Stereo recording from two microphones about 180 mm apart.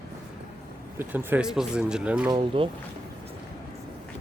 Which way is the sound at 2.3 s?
30° right (ahead or behind).